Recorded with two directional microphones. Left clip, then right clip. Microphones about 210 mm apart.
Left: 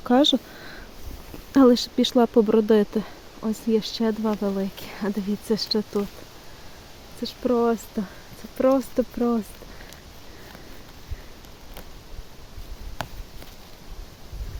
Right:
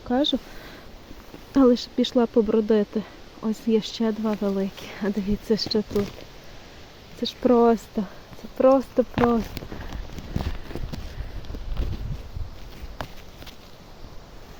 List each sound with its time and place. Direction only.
0.1 s speech: 20° left (ahead or behind)
1.5 s speech: 15° left (ahead or behind)
3.4 s speech: centre (ahead or behind)
7.4 s speech: 20° right (ahead or behind)
8.5 s speech: 5° left (ahead or behind)
13.0 s a sound: 10° left (ahead or behind)